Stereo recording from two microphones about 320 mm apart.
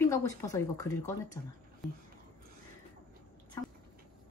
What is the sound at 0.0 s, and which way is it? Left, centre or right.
Speech, centre.